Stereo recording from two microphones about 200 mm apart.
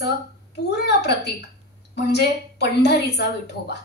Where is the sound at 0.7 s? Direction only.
55° left (ahead or behind).